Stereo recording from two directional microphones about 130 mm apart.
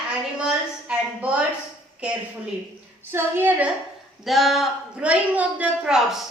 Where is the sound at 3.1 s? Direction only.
15° right (ahead or behind).